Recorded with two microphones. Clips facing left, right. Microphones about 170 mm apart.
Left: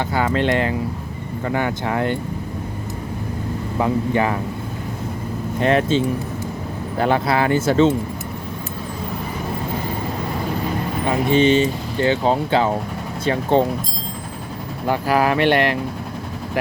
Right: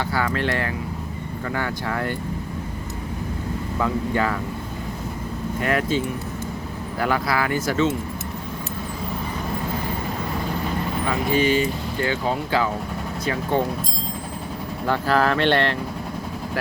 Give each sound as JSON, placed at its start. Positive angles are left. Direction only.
{"t": 0.1, "sound": "speech", "side_deg": 20}
{"t": 3.8, "sound": "speech", "side_deg": 20}
{"t": 5.5, "sound": "speech", "side_deg": 25}
{"t": 7.0, "sound": "speech", "side_deg": 25}
{"t": 11.0, "sound": "speech", "side_deg": 25}
{"t": 14.8, "sound": "speech", "side_deg": 15}